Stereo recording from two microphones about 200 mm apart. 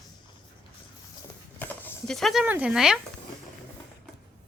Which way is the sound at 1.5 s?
5° left (ahead or behind).